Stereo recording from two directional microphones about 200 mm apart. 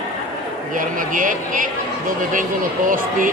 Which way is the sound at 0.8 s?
45° right (ahead or behind).